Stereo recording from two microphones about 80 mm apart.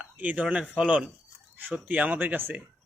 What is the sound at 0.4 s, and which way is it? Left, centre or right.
A man's voice, centre.